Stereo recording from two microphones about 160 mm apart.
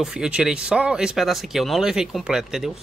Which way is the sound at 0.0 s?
5° right (ahead or behind).